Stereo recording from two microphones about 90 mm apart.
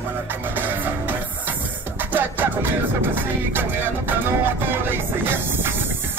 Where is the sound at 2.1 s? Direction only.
20° right (ahead or behind).